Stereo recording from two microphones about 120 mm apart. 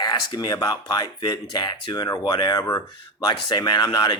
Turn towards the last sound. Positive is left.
turn(degrees=35)  # may be behind; listen again after turning